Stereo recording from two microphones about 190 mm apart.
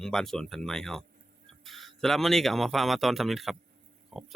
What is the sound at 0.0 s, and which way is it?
Speech, centre (ahead or behind).